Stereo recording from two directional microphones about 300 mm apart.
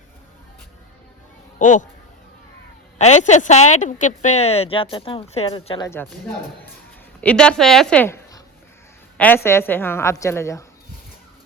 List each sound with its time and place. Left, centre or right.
1.5 s speech: left
3.0 s speech: left
7.2 s a woman's voice: centre